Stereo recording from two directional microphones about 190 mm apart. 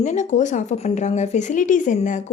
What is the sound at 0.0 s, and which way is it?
Speech, 40° left (ahead or behind).